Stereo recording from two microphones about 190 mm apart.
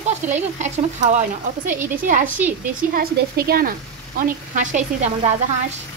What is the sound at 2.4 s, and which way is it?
Speech, 10° right (ahead or behind).